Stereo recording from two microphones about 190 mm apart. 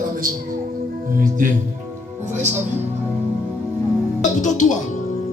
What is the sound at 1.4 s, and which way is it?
Speech, 45° right (ahead or behind).